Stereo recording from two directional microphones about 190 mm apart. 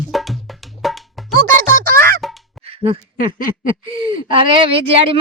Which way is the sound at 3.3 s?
45° left (ahead or behind).